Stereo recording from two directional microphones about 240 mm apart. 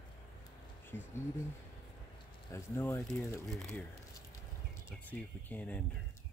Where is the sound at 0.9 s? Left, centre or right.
Centre.